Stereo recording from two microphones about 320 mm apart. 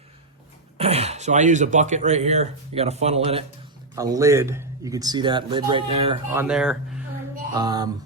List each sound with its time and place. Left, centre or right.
0.8 s speech: centre
6.3 s speech: centre